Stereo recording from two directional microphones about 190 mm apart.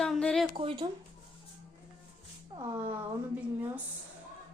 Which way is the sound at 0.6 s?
30° right (ahead or behind).